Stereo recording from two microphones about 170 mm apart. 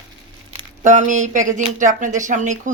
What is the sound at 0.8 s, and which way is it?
Speech, 45° right (ahead or behind).